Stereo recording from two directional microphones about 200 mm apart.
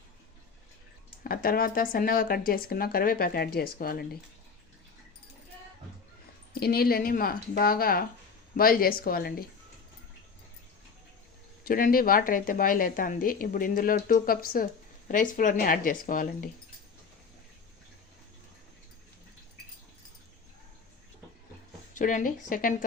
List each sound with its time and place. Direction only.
1.2 s a woman's voice: 45° left (ahead or behind)
6.5 s a woman's voice: 50° left (ahead or behind)
11.6 s a woman's voice: 45° left (ahead or behind)
21.9 s speech: 40° left (ahead or behind)